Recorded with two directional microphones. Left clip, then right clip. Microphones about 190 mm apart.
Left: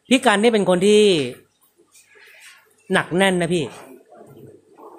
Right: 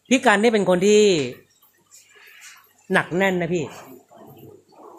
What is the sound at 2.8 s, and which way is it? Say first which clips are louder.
Speech: left 2 dB; 15° left (ahead or behind).